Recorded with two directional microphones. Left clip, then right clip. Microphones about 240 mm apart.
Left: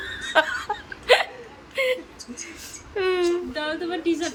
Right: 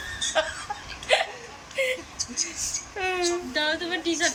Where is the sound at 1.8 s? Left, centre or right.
Centre.